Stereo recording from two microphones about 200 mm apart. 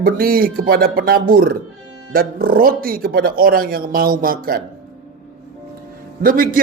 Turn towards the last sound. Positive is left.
turn(degrees=-45)  # may be behind; listen again after turning